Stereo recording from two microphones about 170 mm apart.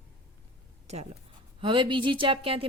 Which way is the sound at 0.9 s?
40° right (ahead or behind).